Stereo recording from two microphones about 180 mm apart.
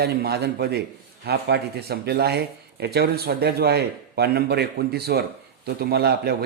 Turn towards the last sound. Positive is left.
turn(degrees=-60)  # may be behind; listen again after turning